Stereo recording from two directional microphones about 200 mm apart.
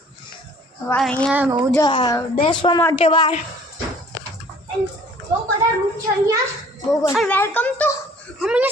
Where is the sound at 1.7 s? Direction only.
20° left (ahead or behind).